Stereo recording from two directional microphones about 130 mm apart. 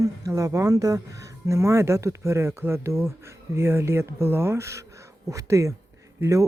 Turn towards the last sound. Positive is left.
turn(degrees=-25)  # may be behind; listen again after turning